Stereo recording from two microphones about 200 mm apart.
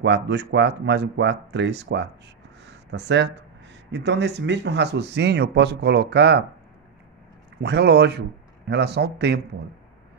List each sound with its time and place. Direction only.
0.0 s speech: 60° right (ahead or behind)
7.6 s speech: 55° right (ahead or behind)